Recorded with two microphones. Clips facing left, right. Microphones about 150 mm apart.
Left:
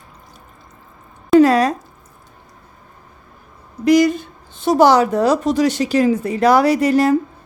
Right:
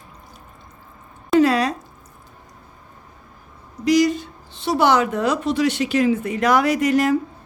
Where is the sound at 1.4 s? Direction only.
45° left (ahead or behind).